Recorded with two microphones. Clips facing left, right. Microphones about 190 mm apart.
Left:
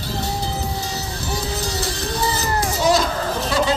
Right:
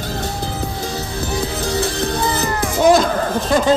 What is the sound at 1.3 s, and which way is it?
Music, 55° right (ahead or behind).